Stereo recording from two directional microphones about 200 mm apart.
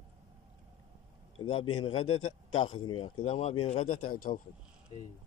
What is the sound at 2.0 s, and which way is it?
Speech, 90° left.